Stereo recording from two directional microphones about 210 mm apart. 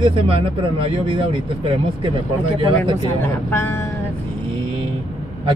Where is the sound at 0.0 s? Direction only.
25° right (ahead or behind).